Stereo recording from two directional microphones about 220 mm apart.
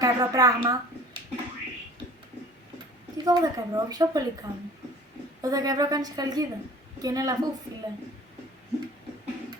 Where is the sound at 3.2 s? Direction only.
20° right (ahead or behind).